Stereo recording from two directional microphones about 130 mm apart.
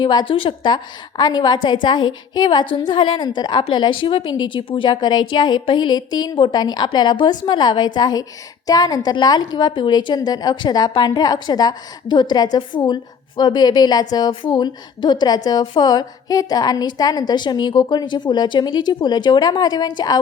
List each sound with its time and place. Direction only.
0.0 s a woman's voice: 35° left (ahead or behind)